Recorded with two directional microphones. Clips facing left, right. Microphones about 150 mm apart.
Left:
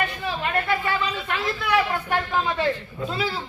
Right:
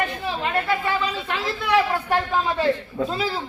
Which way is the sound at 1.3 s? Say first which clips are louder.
Right 2 dB; 30° right (ahead or behind).